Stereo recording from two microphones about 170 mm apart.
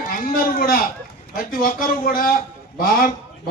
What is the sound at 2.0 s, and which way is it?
Speech, 60° left (ahead or behind).